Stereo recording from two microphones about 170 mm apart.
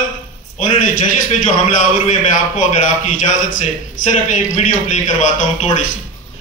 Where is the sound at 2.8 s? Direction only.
45° left (ahead or behind).